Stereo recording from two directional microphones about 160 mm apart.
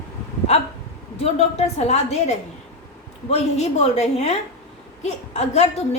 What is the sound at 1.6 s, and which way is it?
A woman's voice, 40° left (ahead or behind).